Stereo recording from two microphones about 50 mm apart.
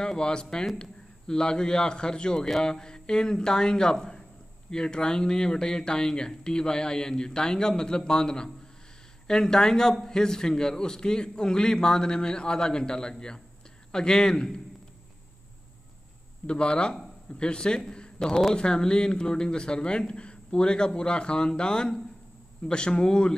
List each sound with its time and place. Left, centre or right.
0.0 s speech: centre
16.4 s a man's voice: centre